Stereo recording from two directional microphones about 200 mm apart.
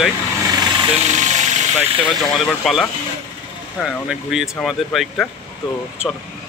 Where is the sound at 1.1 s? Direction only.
35° right (ahead or behind).